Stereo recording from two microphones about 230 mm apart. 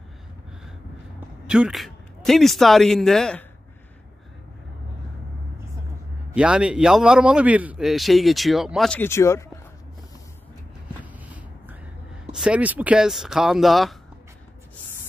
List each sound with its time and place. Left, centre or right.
1.5 s speech: centre
6.3 s a man's voice: centre
12.3 s a man's voice: centre